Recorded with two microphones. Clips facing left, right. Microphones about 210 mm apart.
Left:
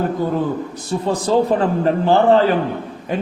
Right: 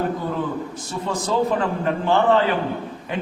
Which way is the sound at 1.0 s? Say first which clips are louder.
Left 5 dB; 35° left (ahead or behind).